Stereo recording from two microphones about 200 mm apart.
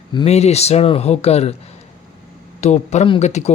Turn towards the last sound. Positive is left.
turn(degrees=35)  # may be behind; listen again after turning